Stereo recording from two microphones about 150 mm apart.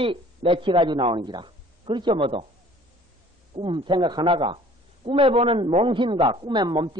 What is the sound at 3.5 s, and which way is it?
Speech, 30° right (ahead or behind).